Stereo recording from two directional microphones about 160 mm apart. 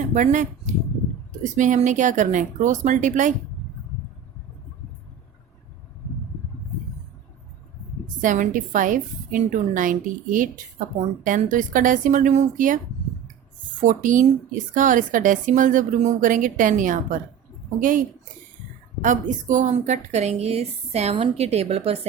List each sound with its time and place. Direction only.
0.1 s a woman's voice: 50° right (ahead or behind)
8.2 s a woman's voice: 55° right (ahead or behind)
13.8 s a woman's voice: 55° right (ahead or behind)
19.0 s a woman's voice: 55° right (ahead or behind)